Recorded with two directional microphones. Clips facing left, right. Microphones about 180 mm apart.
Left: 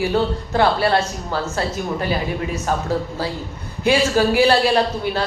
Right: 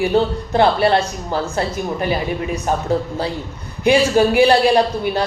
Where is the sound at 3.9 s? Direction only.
20° right (ahead or behind).